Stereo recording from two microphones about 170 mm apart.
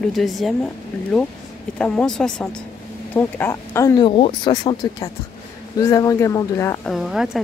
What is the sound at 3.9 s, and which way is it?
Speech, 30° left (ahead or behind).